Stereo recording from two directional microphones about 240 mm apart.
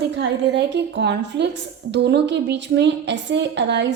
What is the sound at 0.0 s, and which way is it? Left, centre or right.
A woman's voice, right.